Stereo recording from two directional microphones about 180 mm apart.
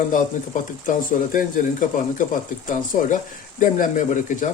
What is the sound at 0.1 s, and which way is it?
Speech, 45° left (ahead or behind).